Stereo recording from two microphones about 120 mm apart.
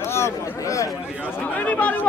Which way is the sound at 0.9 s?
10° right (ahead or behind).